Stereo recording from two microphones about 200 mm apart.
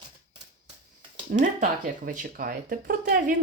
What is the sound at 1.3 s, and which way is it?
Speech, 40° right (ahead or behind).